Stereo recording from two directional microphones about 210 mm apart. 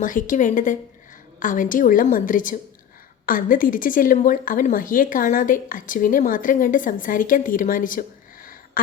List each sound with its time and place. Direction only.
0.0 s a woman's voice: 40° left (ahead or behind)